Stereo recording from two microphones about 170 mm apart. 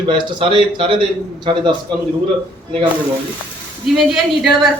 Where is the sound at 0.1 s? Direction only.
30° right (ahead or behind).